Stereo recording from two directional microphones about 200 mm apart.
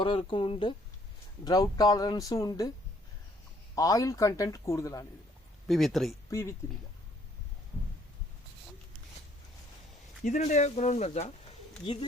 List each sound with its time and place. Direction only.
0.0 s speech: 25° left (ahead or behind)
3.8 s speech: 15° left (ahead or behind)
5.6 s speech: centre (ahead or behind)
10.2 s speech: 35° left (ahead or behind)